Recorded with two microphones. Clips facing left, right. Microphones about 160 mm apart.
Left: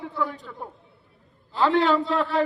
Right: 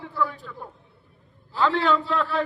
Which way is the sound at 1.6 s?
20° left (ahead or behind).